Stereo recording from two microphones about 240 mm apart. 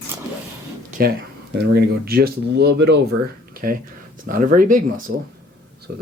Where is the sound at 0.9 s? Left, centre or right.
Right.